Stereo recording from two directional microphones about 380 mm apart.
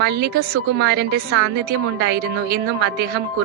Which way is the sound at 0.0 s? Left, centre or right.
Right.